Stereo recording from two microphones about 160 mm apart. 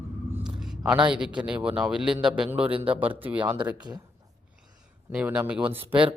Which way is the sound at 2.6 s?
35° right (ahead or behind).